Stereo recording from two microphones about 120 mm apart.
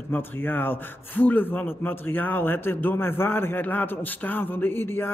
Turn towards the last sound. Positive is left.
turn(degrees=20)  # may be behind; listen again after turning